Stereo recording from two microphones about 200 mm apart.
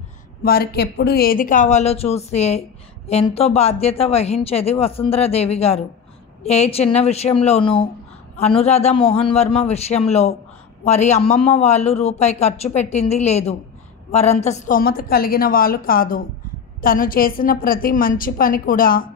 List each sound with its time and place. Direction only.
0.4 s a man's voice: 50° left (ahead or behind)